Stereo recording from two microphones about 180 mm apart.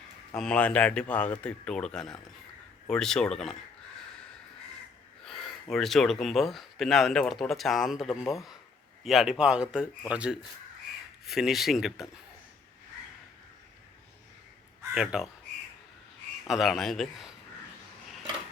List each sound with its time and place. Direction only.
0.3 s speech: 5° left (ahead or behind)
5.2 s speech: centre (ahead or behind)
14.9 s speech: 5° right (ahead or behind)
16.5 s speech: centre (ahead or behind)